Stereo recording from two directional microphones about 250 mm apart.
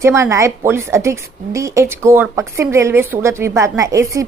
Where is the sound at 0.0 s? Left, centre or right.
Centre.